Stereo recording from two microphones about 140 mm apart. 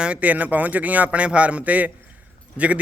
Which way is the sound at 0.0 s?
10° right (ahead or behind).